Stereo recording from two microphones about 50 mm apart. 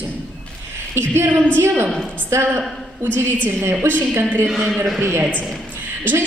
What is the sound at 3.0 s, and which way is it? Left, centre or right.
Speech, right.